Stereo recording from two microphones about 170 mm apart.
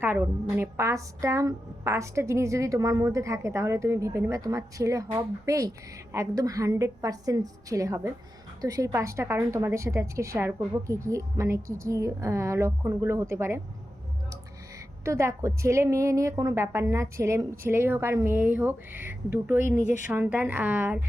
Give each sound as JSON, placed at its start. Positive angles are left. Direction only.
{"t": 0.0, "sound": "a woman's voice", "side_deg": -15}
{"t": 15.0, "sound": "a woman's voice", "side_deg": -20}